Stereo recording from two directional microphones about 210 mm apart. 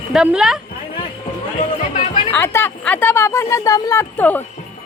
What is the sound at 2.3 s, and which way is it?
Speech, 10° left (ahead or behind).